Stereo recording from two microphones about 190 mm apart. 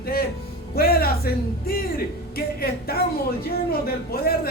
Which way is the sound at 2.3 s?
55° left (ahead or behind).